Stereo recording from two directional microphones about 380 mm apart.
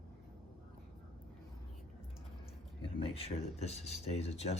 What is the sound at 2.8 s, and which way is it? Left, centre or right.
Speech, centre.